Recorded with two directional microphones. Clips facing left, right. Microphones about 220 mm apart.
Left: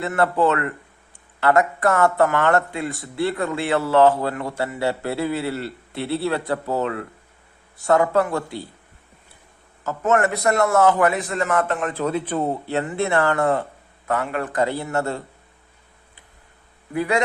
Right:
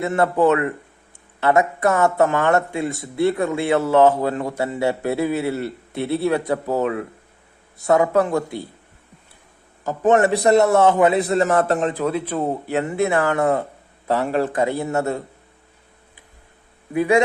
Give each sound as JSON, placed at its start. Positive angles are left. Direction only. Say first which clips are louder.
{"t": 0.1, "sound": "speech", "louder": "right 2 dB", "side_deg": -15}
{"t": 9.8, "sound": "a man's voice", "louder": "right 4 dB", "side_deg": -15}
{"t": 10.1, "sound": "speech", "louder": "right 5 dB", "side_deg": -30}
{"t": 12.0, "sound": "speech", "louder": "right 1 dB", "side_deg": -5}
{"t": 12.8, "sound": "speech", "louder": "right 3 dB", "side_deg": -20}
{"t": 13.1, "sound": "speech", "louder": "left 1 dB", "side_deg": -10}
{"t": 14.1, "sound": "speech", "louder": "right 4 dB", "side_deg": -30}
{"t": 16.9, "sound": "speech", "louder": "right 5 dB", "side_deg": -20}